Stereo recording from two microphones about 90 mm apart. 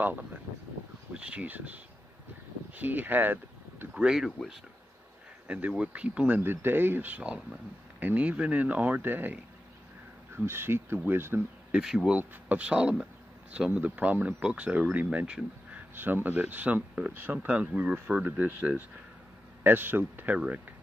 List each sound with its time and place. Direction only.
0.0 s speech: 20° right (ahead or behind)
3.9 s speech: 5° right (ahead or behind)
5.5 s speech: 10° right (ahead or behind)
11.7 s speech: 5° right (ahead or behind)
12.2 s speech: 15° right (ahead or behind)
15.9 s speech: 20° right (ahead or behind)